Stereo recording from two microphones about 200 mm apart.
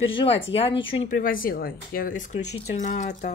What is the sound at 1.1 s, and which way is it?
Speech, 45° left (ahead or behind).